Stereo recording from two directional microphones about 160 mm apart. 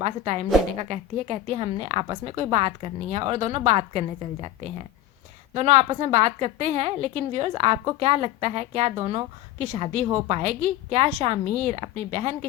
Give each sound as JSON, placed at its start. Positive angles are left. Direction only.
{"t": 0.0, "sound": "a woman's voice", "side_deg": -40}